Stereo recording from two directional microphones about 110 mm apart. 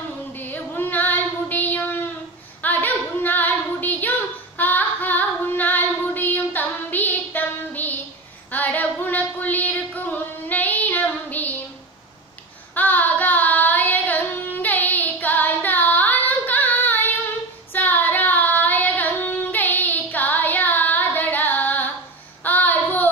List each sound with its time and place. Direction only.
0.3 s child singing: 15° left (ahead or behind)
2.6 s female singing: 15° left (ahead or behind)
4.6 s child singing: 15° left (ahead or behind)
12.7 s child singing: 15° left (ahead or behind)